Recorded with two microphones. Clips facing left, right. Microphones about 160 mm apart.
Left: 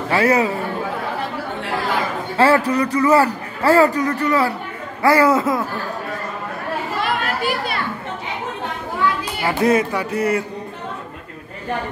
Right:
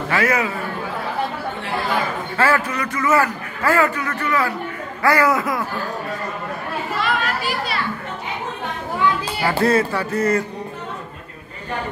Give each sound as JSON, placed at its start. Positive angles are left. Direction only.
{"t": 0.1, "sound": "a man's voice", "side_deg": 30}
{"t": 2.3, "sound": "a man's voice", "side_deg": 30}
{"t": 7.0, "sound": "children playing", "side_deg": 50}
{"t": 9.5, "sound": "speech", "side_deg": 15}